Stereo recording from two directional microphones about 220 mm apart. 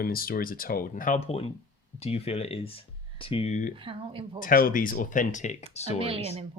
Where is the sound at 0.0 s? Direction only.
40° left (ahead or behind).